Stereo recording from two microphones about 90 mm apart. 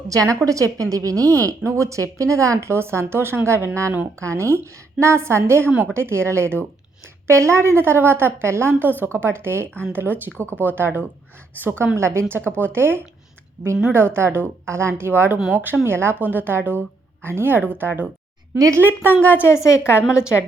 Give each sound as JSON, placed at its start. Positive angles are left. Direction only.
{"t": 0.1, "sound": "a woman's voice", "side_deg": -40}
{"t": 13.6, "sound": "a woman's voice", "side_deg": -50}
{"t": 13.9, "sound": "a woman's voice", "side_deg": -25}
{"t": 19.2, "sound": "a woman's voice", "side_deg": 20}
{"t": 19.5, "sound": "a woman's voice", "side_deg": 35}